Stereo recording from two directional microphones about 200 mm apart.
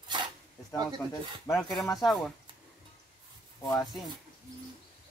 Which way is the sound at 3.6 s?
20° left (ahead or behind).